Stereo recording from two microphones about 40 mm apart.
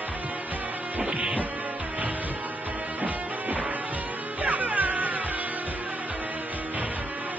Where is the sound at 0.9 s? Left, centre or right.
Right.